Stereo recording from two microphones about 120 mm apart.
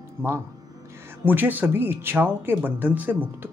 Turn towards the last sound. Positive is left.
turn(degrees=-15)  # may be behind; listen again after turning